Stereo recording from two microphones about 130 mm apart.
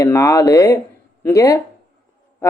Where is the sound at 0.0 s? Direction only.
25° left (ahead or behind).